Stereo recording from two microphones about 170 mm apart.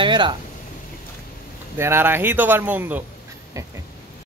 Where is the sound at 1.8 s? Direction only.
15° right (ahead or behind).